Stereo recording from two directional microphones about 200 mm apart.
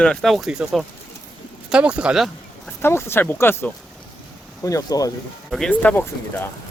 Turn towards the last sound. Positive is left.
turn(degrees=10)  # may be behind; listen again after turning